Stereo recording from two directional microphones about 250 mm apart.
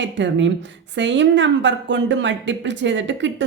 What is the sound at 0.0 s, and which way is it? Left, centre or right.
Speech, right.